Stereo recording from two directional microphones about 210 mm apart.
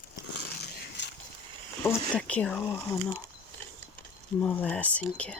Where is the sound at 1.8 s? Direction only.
10° left (ahead or behind).